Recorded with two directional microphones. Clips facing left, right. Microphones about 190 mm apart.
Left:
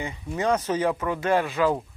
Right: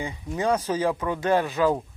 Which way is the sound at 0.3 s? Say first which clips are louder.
Even; 10° right (ahead or behind).